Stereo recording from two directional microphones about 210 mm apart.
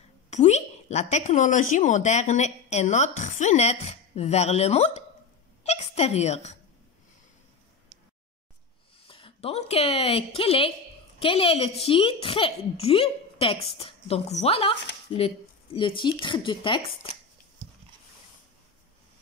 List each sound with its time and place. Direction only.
0.3 s a woman's voice: 35° left (ahead or behind)
5.6 s a sound: 30° left (ahead or behind)
9.0 s a woman's voice: 25° left (ahead or behind)